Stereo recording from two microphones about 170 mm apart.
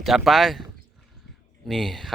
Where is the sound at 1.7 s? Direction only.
Centre (ahead or behind).